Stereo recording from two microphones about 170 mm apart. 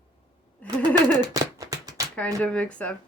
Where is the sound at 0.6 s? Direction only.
10° left (ahead or behind).